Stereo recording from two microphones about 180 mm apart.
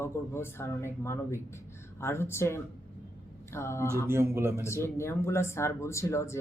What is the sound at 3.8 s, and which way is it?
Speech, 15° right (ahead or behind).